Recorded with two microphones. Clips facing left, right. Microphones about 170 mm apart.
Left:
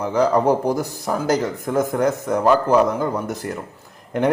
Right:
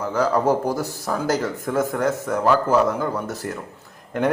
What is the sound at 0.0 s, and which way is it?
Speech, 15° left (ahead or behind).